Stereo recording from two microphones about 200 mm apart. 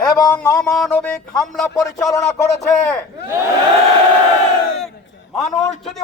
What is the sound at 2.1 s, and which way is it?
Music, 15° left (ahead or behind).